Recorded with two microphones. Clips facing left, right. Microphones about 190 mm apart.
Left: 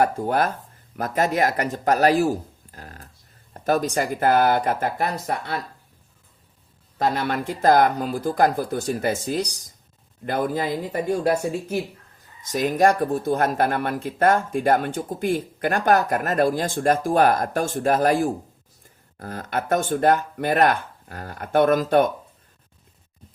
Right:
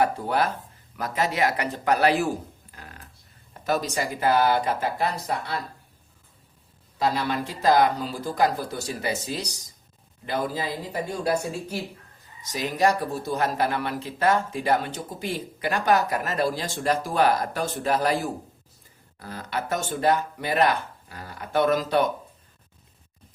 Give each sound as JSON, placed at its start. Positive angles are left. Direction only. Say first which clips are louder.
{"t": 0.0, "sound": "speech", "louder": "left 3 dB", "side_deg": 45}
{"t": 3.5, "sound": "speech", "louder": "left 4 dB", "side_deg": 50}
{"t": 7.0, "sound": "speech", "louder": "left 2 dB", "side_deg": 55}